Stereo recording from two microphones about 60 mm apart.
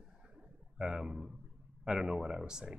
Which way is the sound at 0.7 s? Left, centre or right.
Centre.